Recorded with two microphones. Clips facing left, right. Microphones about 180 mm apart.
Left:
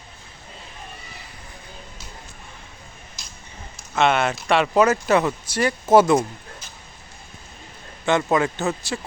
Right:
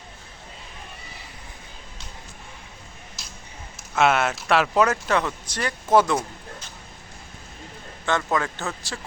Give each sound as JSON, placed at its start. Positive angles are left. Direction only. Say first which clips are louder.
{"t": 3.2, "sound": "a sound", "louder": "right 1 dB", "side_deg": -5}
{"t": 3.9, "sound": "speech", "louder": "left 1 dB", "side_deg": -5}
{"t": 8.0, "sound": "speech", "louder": "left 5 dB", "side_deg": 15}